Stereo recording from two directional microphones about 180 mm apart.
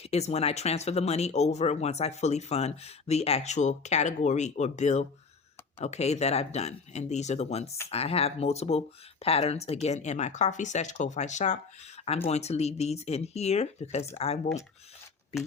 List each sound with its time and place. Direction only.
0.0 s speech: 35° left (ahead or behind)